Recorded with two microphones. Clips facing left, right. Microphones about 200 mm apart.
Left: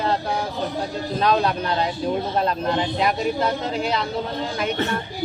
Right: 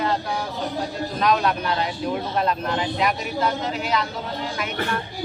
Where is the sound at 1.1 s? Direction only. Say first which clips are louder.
Left 1 dB; 30° left (ahead or behind).